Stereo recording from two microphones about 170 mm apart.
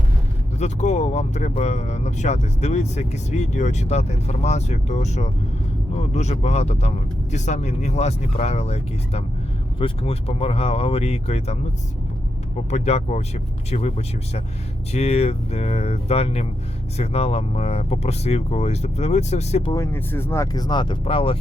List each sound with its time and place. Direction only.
0.6 s speech: 40° left (ahead or behind)
12.7 s speech: 40° left (ahead or behind)
19.7 s speech: 15° left (ahead or behind); by 21.3 s 30° left (ahead or behind)